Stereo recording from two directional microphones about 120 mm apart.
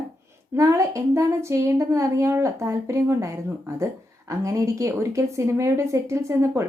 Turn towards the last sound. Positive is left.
turn(degrees=-25)  # may be behind; listen again after turning